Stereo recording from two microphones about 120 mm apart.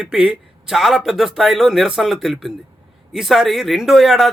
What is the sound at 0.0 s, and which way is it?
A man's voice, 5° right (ahead or behind).